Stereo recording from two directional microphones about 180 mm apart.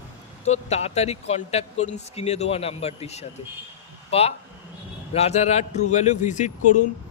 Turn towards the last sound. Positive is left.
turn(degrees=45)  # may be behind; listen again after turning